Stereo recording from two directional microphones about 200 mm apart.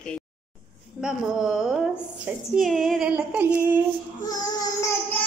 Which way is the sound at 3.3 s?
5° right (ahead or behind).